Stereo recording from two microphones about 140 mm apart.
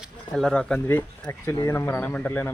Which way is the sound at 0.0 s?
Centre (ahead or behind).